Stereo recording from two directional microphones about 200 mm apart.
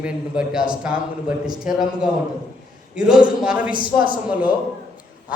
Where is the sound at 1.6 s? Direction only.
Centre (ahead or behind).